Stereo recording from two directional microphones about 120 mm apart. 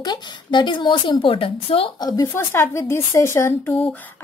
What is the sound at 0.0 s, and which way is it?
A woman's voice, 40° left (ahead or behind).